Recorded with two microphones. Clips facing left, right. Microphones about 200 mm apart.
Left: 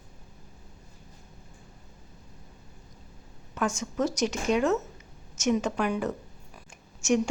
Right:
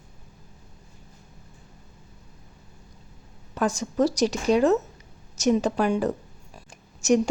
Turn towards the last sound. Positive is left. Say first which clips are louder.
# right 4 dB
turn(degrees=-40)  # may be behind; listen again after turning